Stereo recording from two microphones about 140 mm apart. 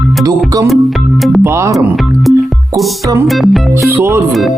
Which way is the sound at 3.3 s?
Centre (ahead or behind).